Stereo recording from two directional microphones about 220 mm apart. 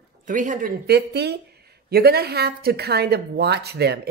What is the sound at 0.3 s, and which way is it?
Speech, 35° right (ahead or behind).